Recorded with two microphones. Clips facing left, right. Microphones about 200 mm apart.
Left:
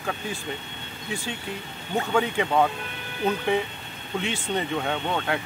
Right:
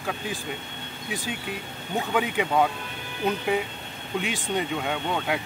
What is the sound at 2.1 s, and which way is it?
Speech, 5° right (ahead or behind).